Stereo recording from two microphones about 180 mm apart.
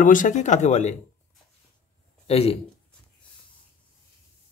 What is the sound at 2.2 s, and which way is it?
Speech, 35° left (ahead or behind).